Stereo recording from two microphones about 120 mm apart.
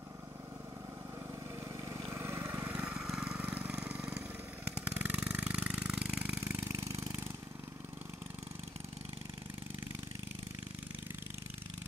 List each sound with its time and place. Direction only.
1.9 s vehicle: 25° right (ahead or behind); by 4.2 s 5° right (ahead or behind)
4.7 s a sound: 10° right (ahead or behind)
6.4 s engine: 25° right (ahead or behind)